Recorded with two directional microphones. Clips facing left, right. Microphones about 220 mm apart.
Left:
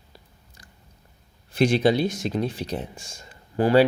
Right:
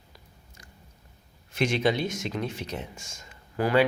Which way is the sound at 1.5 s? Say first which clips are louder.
Left 6 dB; 35° left (ahead or behind).